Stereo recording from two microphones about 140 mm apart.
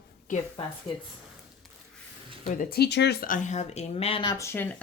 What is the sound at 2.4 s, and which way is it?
Speech, 75° left (ahead or behind).